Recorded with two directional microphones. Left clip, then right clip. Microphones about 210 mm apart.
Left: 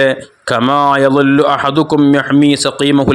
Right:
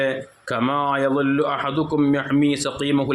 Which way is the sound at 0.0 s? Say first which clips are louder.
Left 10 dB; 40° left (ahead or behind).